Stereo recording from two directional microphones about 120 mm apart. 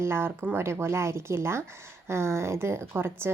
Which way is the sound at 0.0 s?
20° right (ahead or behind).